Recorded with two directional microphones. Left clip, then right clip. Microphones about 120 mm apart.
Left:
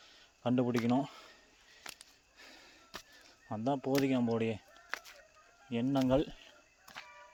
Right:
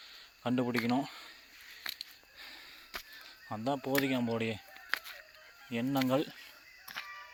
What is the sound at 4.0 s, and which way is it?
Speech, 40° left (ahead or behind).